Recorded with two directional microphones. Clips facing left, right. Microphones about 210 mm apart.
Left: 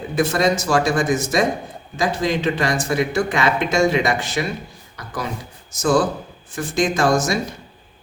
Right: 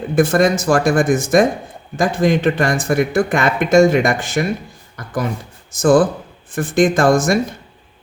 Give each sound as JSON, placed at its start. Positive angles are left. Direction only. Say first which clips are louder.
{"t": 0.2, "sound": "speech", "louder": "right 4 dB", "side_deg": -50}
{"t": 4.9, "sound": "a sound", "louder": "right 6 dB", "side_deg": -50}
{"t": 5.7, "sound": "speech", "louder": "right 5 dB", "side_deg": -50}